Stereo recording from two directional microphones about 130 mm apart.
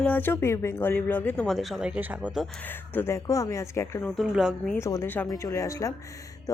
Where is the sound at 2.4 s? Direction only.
15° left (ahead or behind).